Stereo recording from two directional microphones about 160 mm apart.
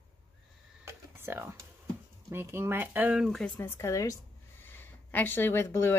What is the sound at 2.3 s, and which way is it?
Speech, 15° right (ahead or behind).